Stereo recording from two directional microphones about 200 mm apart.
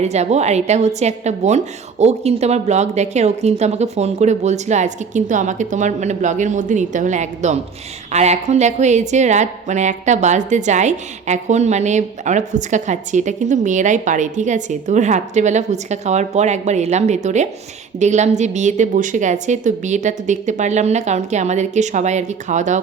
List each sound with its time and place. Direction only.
0.0 s a woman's voice: 35° right (ahead or behind)